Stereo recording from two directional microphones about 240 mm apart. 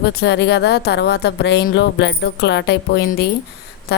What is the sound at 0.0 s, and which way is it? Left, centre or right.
A woman's voice, left.